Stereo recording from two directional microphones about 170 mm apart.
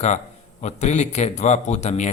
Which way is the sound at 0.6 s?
40° left (ahead or behind).